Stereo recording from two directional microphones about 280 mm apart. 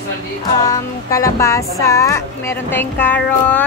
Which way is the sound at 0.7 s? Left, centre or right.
Centre.